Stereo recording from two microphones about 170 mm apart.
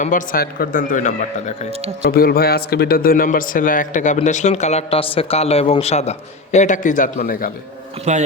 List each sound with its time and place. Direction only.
0.0 s a man's voice: 50° left (ahead or behind)
2.0 s a man's voice: 65° left (ahead or behind)
8.1 s a man's voice: 40° right (ahead or behind)